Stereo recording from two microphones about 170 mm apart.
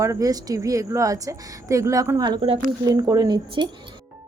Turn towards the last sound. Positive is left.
turn(degrees=-25)  # may be behind; listen again after turning